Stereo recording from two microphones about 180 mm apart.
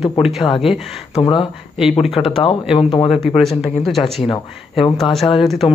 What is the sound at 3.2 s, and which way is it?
Speech, centre (ahead or behind).